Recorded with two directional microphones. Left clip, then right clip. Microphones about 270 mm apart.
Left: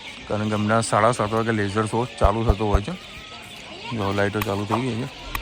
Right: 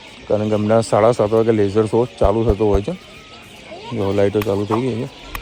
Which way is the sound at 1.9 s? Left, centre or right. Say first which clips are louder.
Right 6 dB; left.